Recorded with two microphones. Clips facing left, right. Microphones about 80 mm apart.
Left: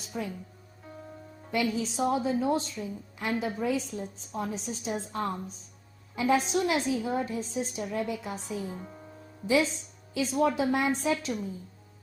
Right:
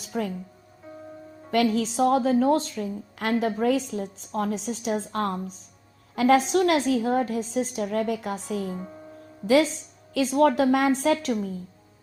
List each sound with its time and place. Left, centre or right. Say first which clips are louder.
0.1 s speech: right 6 dB; right
1.5 s a woman's voice: right 6 dB; right
6.1 s a woman's voice: right 6 dB; right
7.0 s a woman's voice: right 6 dB; right
10.2 s a woman's voice: right 6 dB; right